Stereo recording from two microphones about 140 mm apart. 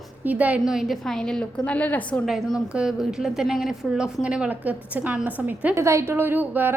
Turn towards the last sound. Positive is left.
turn(degrees=-15)  # may be behind; listen again after turning